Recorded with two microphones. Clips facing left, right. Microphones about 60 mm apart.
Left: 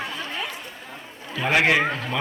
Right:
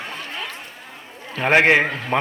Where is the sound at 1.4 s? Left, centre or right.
Right.